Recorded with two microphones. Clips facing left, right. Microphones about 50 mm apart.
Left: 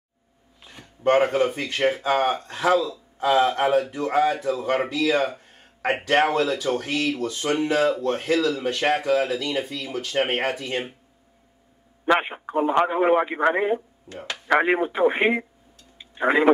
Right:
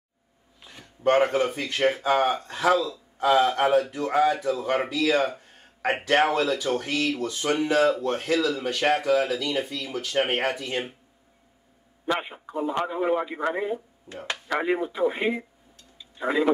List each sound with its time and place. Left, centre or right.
0.6 s speech: centre
5.0 s a sound: centre
5.9 s speech: centre
8.6 s speech: centre
12.1 s a man's voice: left
16.0 s a sound: left